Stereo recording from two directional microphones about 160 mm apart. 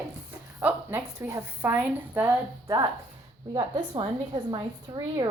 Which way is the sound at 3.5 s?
30° right (ahead or behind).